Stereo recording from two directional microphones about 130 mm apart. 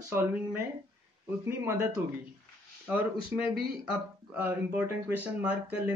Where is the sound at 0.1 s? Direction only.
20° right (ahead or behind).